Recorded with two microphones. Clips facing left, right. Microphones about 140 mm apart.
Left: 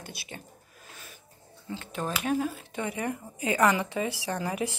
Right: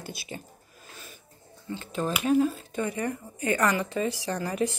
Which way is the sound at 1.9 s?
5° left (ahead or behind).